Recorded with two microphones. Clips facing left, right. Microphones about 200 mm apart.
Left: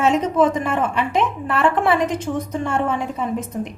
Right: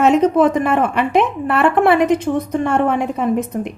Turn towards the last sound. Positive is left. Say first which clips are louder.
# right 6 dB
turn(degrees=-65)  # may be behind; listen again after turning